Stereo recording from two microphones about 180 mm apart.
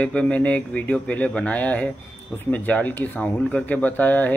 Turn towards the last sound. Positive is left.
turn(degrees=10)  # may be behind; listen again after turning